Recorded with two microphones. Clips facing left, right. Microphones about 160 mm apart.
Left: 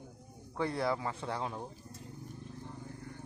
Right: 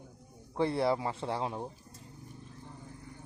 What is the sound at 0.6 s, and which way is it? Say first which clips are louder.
Speech: right 4 dB; 25° right (ahead or behind).